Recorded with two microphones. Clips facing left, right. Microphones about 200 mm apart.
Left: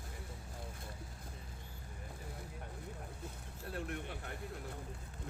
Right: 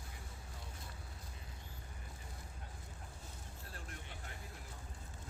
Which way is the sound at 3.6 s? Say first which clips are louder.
Left 12 dB; 60° left (ahead or behind).